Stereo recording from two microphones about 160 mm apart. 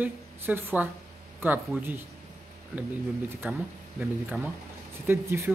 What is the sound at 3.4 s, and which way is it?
Speech, 10° right (ahead or behind).